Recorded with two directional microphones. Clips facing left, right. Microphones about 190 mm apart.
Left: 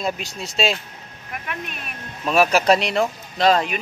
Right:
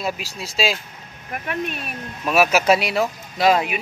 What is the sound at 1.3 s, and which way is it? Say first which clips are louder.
Speech: right 6 dB; 40° right (ahead or behind).